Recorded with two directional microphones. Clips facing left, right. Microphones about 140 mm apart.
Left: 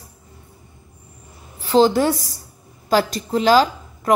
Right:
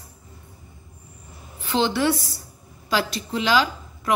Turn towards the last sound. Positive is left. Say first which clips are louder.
# left 5 dB
turn(degrees=40)  # may be behind; listen again after turning